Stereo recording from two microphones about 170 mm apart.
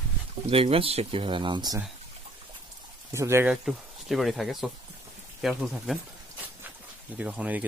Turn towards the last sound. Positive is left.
turn(degrees=-10)  # may be behind; listen again after turning